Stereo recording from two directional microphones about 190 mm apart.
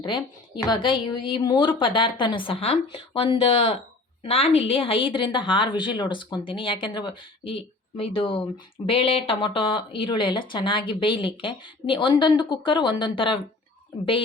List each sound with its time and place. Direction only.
0.0 s a woman's voice: 25° left (ahead or behind)